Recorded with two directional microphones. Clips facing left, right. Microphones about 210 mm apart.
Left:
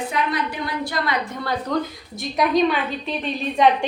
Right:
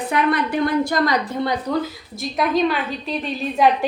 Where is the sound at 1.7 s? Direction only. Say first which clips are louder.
Right 1 dB; 10° right (ahead or behind).